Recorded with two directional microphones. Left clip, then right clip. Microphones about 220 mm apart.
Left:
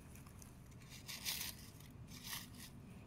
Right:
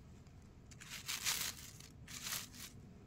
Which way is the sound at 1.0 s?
30° right (ahead or behind).